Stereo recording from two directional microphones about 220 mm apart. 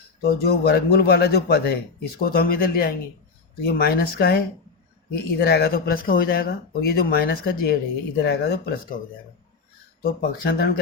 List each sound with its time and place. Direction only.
0.2 s a man's voice: 45° left (ahead or behind)
10.0 s a man's voice: 45° left (ahead or behind)